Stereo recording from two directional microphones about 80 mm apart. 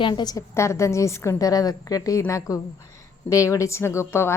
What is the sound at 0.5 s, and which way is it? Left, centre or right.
A woman's voice, left.